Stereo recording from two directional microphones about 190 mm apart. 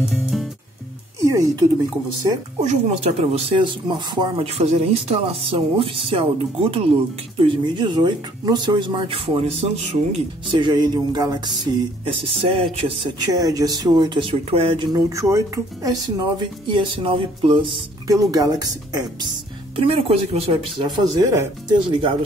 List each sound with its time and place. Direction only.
0.1 s music: centre (ahead or behind)
1.2 s speech: 15° right (ahead or behind)
2.6 s speech: 35° right (ahead or behind)
21.3 s speech: 20° right (ahead or behind)